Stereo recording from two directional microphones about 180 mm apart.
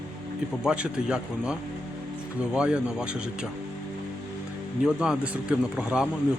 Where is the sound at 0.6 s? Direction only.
5° right (ahead or behind).